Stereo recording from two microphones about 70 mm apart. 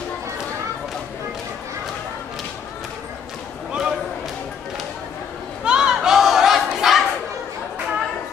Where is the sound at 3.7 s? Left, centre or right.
Centre.